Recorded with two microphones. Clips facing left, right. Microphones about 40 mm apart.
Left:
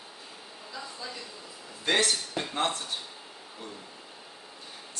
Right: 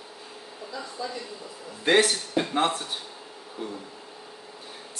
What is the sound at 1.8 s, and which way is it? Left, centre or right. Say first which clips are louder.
Speech: right 5 dB; right.